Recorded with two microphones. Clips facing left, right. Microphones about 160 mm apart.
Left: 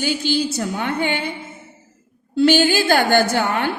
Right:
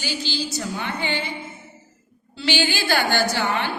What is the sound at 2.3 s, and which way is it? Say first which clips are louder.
A woman's voice: left 9 dB; 50° left (ahead or behind).